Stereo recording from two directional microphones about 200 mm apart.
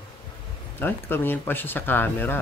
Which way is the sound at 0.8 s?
10° left (ahead or behind).